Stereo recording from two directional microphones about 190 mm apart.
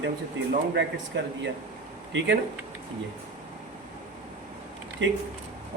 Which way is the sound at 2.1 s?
70° right (ahead or behind).